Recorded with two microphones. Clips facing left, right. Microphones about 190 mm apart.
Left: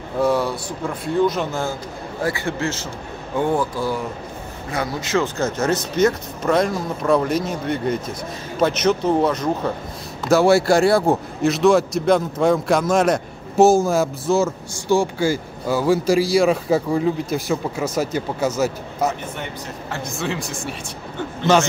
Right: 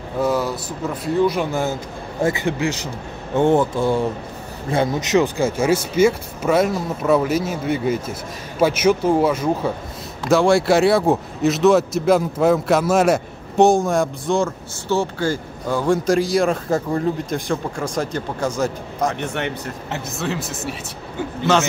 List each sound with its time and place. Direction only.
0.2 s a man's voice: centre (ahead or behind)
10.2 s a man's voice: 5° left (ahead or behind)
19.2 s speech: 75° right (ahead or behind)
20.1 s a man's voice: centre (ahead or behind)